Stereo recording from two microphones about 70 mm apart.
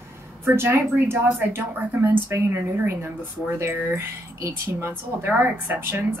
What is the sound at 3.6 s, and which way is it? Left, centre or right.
A woman's voice, right.